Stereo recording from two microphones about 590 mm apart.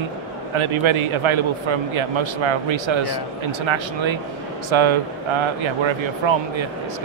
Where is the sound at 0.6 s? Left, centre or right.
Right.